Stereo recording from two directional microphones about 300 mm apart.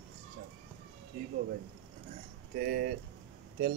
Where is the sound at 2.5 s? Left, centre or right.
Right.